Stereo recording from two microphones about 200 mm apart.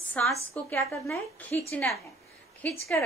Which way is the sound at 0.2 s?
5° left (ahead or behind).